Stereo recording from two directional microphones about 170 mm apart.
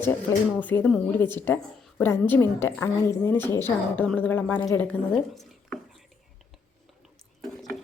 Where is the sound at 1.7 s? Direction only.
Centre (ahead or behind).